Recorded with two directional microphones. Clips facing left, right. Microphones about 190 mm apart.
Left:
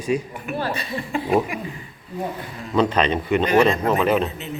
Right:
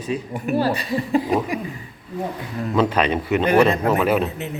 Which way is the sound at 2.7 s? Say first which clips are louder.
Even; 5° right (ahead or behind).